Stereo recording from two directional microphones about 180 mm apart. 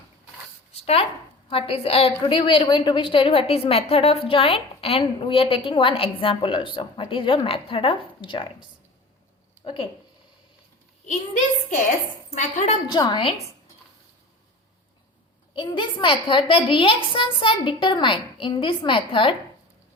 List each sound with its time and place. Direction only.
0.8 s a woman's voice: 35° left (ahead or behind)
9.6 s a woman's voice: 30° left (ahead or behind)
12.3 s a woman's voice: 40° left (ahead or behind)
12.9 s a woman's voice: 25° left (ahead or behind)
15.5 s a woman's voice: 25° left (ahead or behind)